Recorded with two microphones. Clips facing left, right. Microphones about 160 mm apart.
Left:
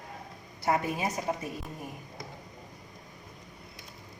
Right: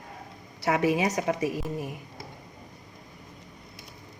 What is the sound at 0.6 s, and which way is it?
A woman's voice, 90° right.